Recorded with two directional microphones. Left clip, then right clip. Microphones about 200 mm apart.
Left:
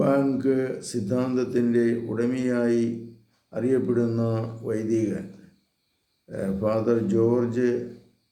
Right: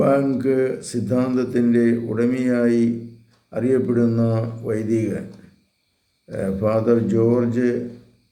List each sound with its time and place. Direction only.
0.0 s speech: 10° right (ahead or behind)
6.2 s speech: 10° right (ahead or behind)